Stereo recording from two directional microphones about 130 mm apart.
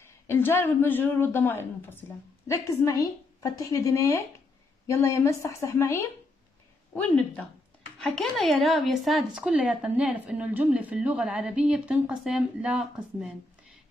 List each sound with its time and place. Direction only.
0.3 s a woman's voice: 20° left (ahead or behind)
6.9 s a woman's voice: centre (ahead or behind)